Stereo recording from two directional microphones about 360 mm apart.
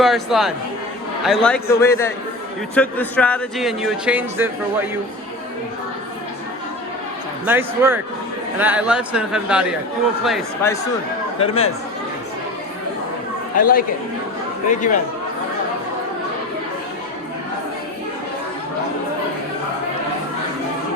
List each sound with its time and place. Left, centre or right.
0.0 s a man's voice: centre
7.4 s a man's voice: centre
13.6 s speech: left